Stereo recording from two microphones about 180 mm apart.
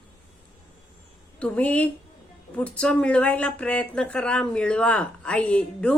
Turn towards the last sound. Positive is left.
turn(degrees=5)  # may be behind; listen again after turning